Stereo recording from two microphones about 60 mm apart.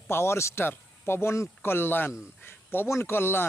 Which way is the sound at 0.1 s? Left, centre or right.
Left.